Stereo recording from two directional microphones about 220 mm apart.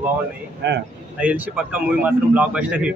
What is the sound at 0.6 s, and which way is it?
Speech, 50° right (ahead or behind).